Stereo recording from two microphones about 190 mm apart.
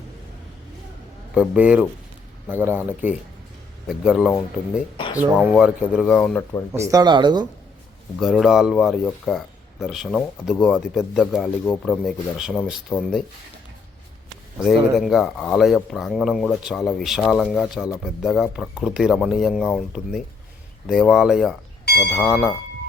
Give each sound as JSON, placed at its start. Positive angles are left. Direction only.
{"t": 1.3, "sound": "speech", "side_deg": -5}
{"t": 6.1, "sound": "speech", "side_deg": 10}
{"t": 6.7, "sound": "speech", "side_deg": -15}
{"t": 8.2, "sound": "speech", "side_deg": 0}
{"t": 12.9, "sound": "speech", "side_deg": 10}
{"t": 14.6, "sound": "speech", "side_deg": 0}
{"t": 21.8, "sound": "bell", "side_deg": 55}
{"t": 22.1, "sound": "speech", "side_deg": 0}